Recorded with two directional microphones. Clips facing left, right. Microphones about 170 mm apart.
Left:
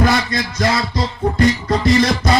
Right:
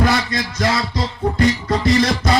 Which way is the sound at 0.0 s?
45° left (ahead or behind).